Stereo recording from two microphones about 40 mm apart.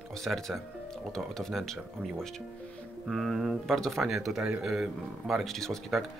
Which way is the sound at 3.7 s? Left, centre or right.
Centre.